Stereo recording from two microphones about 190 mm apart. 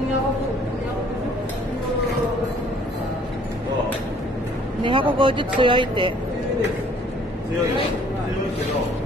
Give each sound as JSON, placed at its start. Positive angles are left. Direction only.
{"t": 4.8, "sound": "speech", "side_deg": -25}